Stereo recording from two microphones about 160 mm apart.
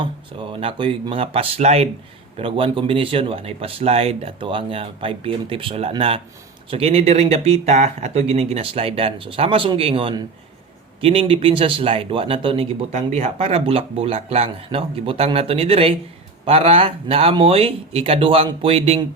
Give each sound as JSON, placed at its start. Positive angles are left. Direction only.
{"t": 0.0, "sound": "speech", "side_deg": -35}